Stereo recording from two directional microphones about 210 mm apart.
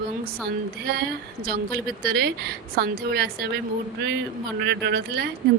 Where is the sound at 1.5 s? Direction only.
45° right (ahead or behind).